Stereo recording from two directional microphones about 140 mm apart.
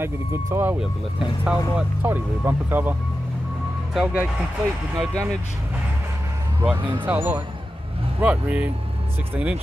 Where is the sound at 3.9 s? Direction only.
10° right (ahead or behind).